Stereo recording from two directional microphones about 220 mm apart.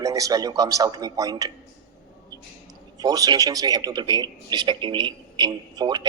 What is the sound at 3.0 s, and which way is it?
A man's voice, 15° right (ahead or behind).